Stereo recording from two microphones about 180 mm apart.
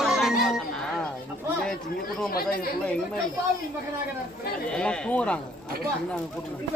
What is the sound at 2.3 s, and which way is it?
Chatter, 55° left (ahead or behind).